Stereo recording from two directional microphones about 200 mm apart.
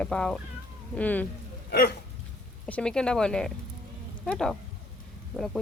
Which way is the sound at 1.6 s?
50° left (ahead or behind).